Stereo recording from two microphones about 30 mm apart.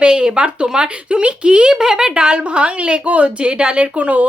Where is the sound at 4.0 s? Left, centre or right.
Right.